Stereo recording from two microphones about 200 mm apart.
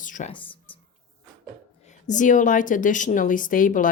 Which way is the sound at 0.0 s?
40° left (ahead or behind).